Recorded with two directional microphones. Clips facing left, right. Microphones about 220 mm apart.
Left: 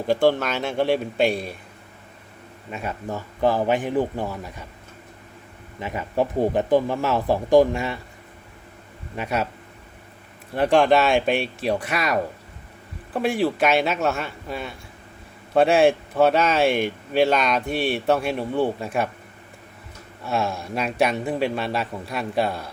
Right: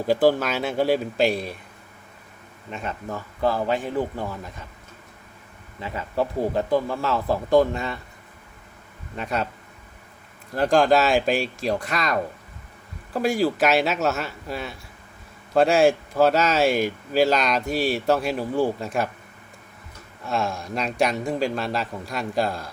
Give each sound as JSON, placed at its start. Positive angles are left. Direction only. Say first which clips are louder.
{"t": 0.1, "sound": "speech", "louder": "even", "side_deg": -5}
{"t": 2.6, "sound": "speech", "louder": "left 2 dB", "side_deg": 10}
{"t": 5.8, "sound": "speech", "louder": "left 2 dB", "side_deg": 15}
{"t": 9.1, "sound": "speech", "louder": "left 2 dB", "side_deg": 5}
{"t": 10.5, "sound": "speech", "louder": "left 1 dB", "side_deg": 0}
{"t": 20.2, "sound": "speech", "louder": "left 1 dB", "side_deg": 0}